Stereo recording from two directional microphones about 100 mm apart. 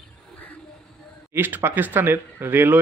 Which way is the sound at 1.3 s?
20° right (ahead or behind).